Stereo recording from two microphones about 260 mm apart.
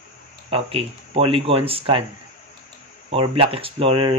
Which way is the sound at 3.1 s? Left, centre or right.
Right.